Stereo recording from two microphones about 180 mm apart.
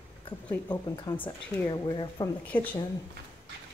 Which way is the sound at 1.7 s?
25° left (ahead or behind).